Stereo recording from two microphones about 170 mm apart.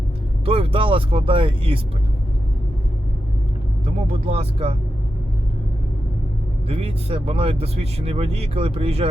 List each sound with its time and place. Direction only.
0.4 s speech: 35° right (ahead or behind)
3.8 s speech: 40° right (ahead or behind)
6.7 s speech: 35° right (ahead or behind)